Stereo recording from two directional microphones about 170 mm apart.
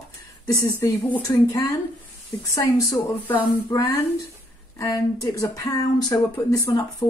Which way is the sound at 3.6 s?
20° left (ahead or behind).